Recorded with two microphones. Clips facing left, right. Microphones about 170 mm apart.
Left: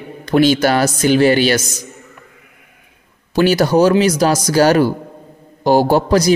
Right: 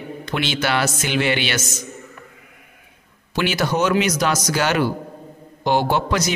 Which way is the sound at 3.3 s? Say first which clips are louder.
Left 8 dB; 40° left (ahead or behind).